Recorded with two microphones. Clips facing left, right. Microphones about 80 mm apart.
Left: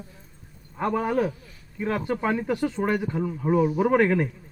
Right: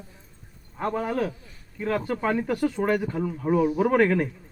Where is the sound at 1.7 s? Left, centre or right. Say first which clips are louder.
Even; centre.